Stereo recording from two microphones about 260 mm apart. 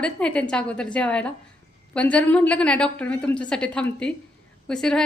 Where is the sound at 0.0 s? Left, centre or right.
Centre.